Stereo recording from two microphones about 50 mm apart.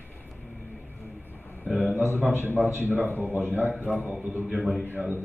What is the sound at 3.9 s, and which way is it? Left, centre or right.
Speech, left.